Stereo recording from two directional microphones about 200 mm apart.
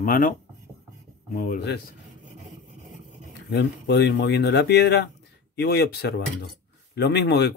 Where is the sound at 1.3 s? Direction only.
45° left (ahead or behind).